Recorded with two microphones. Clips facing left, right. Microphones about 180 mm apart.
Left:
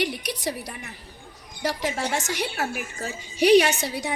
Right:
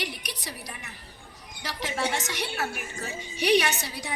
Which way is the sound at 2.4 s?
50° left (ahead or behind).